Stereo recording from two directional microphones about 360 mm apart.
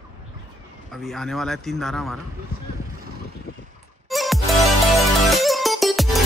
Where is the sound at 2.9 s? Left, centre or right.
Right.